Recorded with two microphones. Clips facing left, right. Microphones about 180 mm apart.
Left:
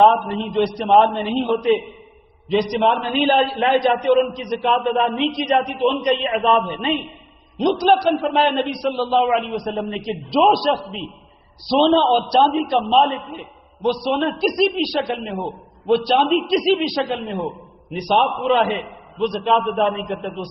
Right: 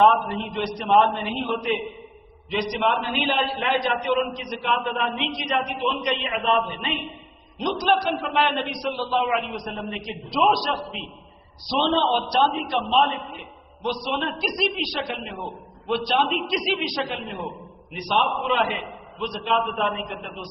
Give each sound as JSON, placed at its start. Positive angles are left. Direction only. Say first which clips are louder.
{"t": 0.0, "sound": "a man's voice", "louder": "left 4 dB", "side_deg": 30}